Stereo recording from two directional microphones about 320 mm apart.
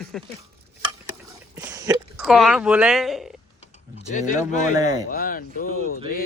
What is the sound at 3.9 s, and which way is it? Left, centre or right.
Speech, left.